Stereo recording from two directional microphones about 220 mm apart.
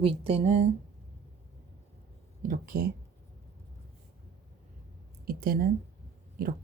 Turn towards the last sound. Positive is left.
turn(degrees=-40)  # may be behind; listen again after turning